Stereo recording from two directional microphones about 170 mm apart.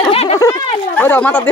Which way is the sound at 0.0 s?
35° left (ahead or behind).